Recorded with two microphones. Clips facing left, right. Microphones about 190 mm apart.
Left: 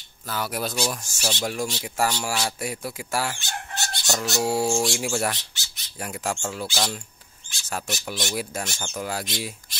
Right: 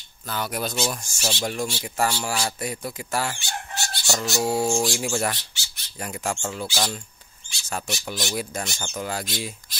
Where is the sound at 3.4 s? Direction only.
15° right (ahead or behind).